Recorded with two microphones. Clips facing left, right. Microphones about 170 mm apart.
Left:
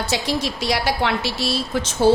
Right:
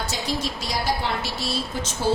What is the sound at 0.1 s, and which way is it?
A woman's voice, 75° left (ahead or behind).